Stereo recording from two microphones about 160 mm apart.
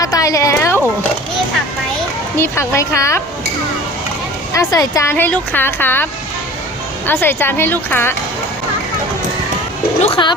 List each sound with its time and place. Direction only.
0.0 s a sound: 20° left (ahead or behind)
2.4 s speech: 20° left (ahead or behind)
4.5 s speech: 20° left (ahead or behind)
7.1 s speech: 15° left (ahead or behind)
10.2 s a woman's voice: 30° left (ahead or behind)